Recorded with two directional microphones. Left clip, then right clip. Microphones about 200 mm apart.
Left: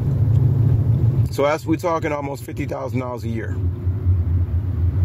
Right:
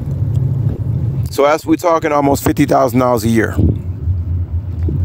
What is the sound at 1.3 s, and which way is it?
Speech, 55° right (ahead or behind).